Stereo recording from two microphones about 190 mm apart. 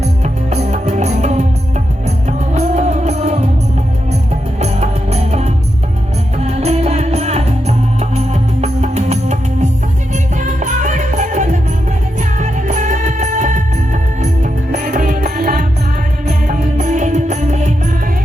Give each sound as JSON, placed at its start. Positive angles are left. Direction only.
{"t": 0.5, "sound": "music", "side_deg": -35}
{"t": 4.6, "sound": "music", "side_deg": -35}